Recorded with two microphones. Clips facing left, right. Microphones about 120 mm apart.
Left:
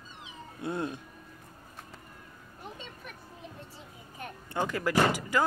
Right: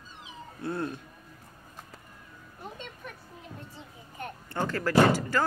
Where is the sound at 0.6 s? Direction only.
20° left (ahead or behind).